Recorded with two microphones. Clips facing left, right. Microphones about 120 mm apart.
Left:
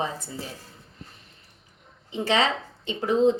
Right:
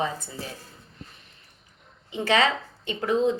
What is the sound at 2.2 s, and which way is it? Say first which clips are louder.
A woman's voice: right 1 dB; 25° left (ahead or behind).